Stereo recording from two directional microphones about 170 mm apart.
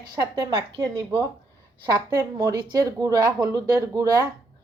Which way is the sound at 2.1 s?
20° right (ahead or behind).